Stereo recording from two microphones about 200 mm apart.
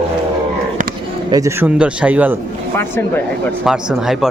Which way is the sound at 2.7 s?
10° left (ahead or behind).